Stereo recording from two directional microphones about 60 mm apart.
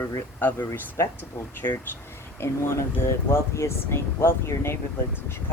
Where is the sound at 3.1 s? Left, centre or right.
Left.